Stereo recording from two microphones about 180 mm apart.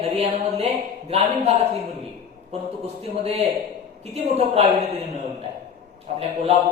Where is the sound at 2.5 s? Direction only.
35° right (ahead or behind).